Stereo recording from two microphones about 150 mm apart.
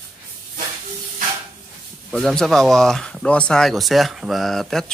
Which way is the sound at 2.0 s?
5° left (ahead or behind).